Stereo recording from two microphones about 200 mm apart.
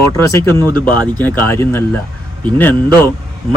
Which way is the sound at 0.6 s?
20° right (ahead or behind).